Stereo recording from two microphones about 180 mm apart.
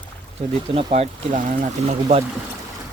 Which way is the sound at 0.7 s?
35° right (ahead or behind).